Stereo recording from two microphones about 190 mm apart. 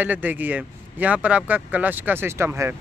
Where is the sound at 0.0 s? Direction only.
10° right (ahead or behind).